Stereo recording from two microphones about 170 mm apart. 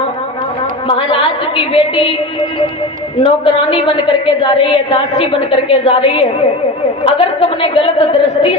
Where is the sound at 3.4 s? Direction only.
30° left (ahead or behind).